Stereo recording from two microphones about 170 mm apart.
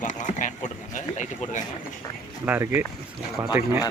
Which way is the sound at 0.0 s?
50° left (ahead or behind).